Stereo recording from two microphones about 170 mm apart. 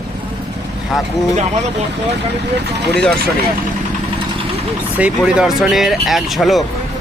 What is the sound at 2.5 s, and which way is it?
Speech, 80° right.